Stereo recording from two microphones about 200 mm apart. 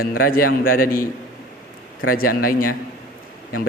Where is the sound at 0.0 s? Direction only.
45° left (ahead or behind).